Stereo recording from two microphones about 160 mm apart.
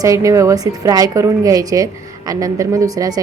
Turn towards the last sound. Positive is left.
turn(degrees=-20)  # may be behind; listen again after turning